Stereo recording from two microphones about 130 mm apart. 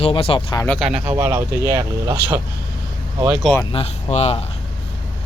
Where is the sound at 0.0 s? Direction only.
45° left (ahead or behind).